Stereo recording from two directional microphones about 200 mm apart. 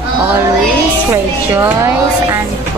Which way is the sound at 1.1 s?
15° right (ahead or behind).